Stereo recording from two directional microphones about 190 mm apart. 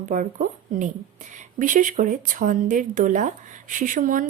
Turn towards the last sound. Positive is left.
turn(degrees=-45)  # may be behind; listen again after turning